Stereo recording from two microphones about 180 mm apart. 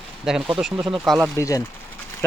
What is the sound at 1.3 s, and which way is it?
Speech, 15° left (ahead or behind).